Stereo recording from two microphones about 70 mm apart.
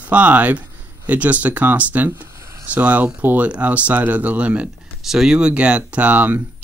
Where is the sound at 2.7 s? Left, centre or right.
Right.